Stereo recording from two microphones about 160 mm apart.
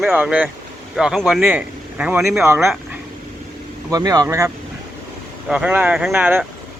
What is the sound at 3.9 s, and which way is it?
Speech, 20° right (ahead or behind).